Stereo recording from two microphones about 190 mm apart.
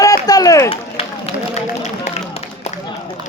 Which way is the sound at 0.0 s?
20° left (ahead or behind).